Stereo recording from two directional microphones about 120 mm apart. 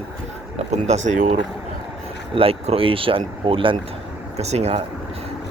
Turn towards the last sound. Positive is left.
turn(degrees=-65)  # may be behind; listen again after turning